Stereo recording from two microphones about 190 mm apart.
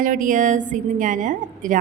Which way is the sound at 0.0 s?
45° right (ahead or behind).